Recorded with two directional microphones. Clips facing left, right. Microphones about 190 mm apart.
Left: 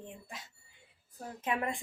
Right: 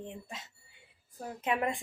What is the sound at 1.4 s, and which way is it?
Speech, 20° right (ahead or behind).